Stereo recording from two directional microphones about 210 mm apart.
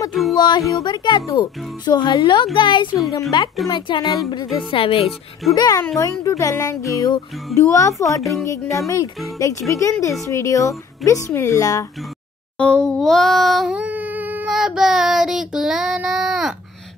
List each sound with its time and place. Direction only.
0.1 s speech: centre (ahead or behind)
0.4 s speech: 20° left (ahead or behind)
8.2 s speech: centre (ahead or behind)
8.6 s speech: 15° left (ahead or behind)
12.5 s a sound: 5° left (ahead or behind)